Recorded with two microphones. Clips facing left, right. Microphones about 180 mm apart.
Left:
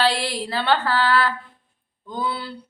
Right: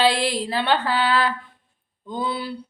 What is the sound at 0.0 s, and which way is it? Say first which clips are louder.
Music: right 2 dB; 15° right (ahead or behind).